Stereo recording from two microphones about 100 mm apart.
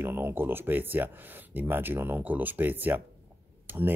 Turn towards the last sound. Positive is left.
turn(degrees=-20)  # may be behind; listen again after turning